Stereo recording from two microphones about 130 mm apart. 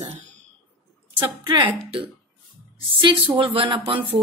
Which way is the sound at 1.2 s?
35° right (ahead or behind).